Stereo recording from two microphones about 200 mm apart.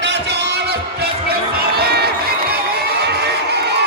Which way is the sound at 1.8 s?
55° right (ahead or behind).